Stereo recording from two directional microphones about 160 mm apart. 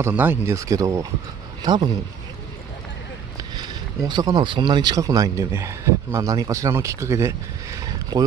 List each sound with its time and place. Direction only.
0.0 s a man's voice: 10° right (ahead or behind); by 1.9 s 30° right (ahead or behind)
3.5 s speech: 25° right (ahead or behind)